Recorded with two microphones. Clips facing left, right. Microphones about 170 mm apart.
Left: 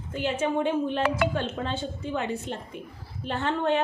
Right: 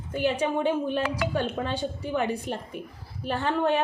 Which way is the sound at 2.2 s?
15° right (ahead or behind).